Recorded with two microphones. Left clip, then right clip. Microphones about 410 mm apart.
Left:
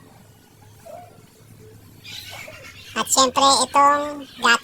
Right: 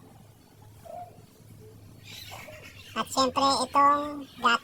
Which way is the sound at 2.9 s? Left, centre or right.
Right.